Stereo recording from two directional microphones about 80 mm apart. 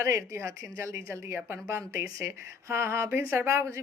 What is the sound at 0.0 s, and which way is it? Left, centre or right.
Speech, right.